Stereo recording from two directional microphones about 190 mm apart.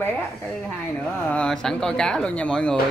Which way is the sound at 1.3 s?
5° left (ahead or behind).